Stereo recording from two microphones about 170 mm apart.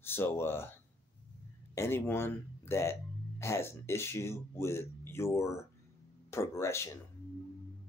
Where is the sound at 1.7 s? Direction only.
15° left (ahead or behind).